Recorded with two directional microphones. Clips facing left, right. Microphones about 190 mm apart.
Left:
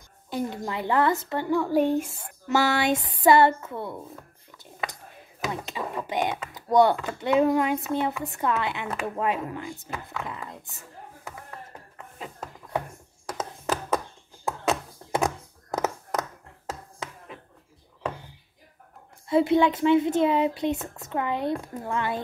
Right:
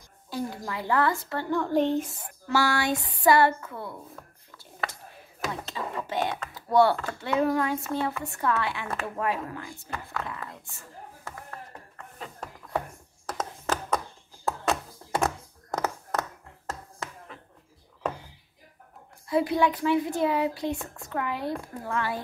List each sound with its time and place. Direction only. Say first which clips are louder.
0.3 s speech: left 3 dB; 20° left (ahead or behind)
2.1 s speech: left 2 dB; 20° left (ahead or behind)
5.5 s speech: left 3 dB; 15° left (ahead or behind)
12.2 s a sound: left 2 dB; 10° left (ahead or behind)
15.0 s a sound: left 1 dB; 20° left (ahead or behind)
19.2 s speech: left 4 dB; 25° left (ahead or behind)